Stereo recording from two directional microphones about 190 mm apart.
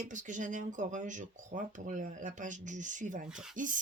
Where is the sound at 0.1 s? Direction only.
40° right (ahead or behind).